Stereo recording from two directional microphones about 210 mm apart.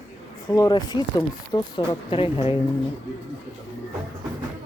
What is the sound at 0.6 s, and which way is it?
Speech, 20° left (ahead or behind).